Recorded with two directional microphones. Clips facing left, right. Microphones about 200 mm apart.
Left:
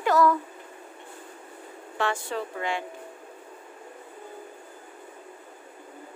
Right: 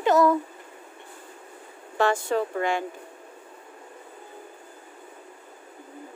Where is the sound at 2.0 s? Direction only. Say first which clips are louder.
Right 6 dB; 45° right (ahead or behind).